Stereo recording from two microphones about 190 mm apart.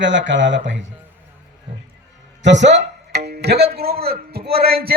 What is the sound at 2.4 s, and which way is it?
Music, 70° right (ahead or behind).